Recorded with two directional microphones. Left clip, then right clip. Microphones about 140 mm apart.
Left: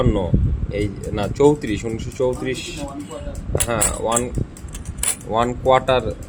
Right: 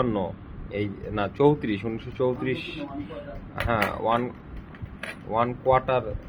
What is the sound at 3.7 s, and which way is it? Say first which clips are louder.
Speech: left 2 dB; 20° left (ahead or behind).